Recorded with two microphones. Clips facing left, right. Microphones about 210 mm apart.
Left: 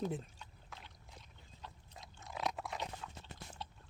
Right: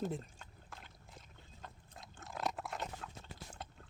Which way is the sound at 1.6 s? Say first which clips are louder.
Even; 50° right (ahead or behind).